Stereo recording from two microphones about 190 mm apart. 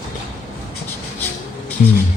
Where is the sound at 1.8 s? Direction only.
45° left (ahead or behind).